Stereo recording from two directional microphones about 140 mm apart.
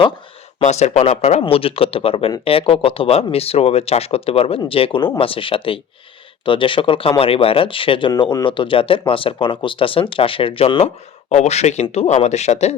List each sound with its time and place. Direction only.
0.6 s a man's voice: 55° left (ahead or behind)
11.3 s a man's voice: 55° left (ahead or behind)